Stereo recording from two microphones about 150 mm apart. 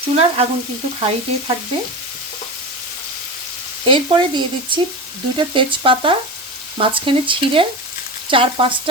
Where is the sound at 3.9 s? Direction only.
30° right (ahead or behind).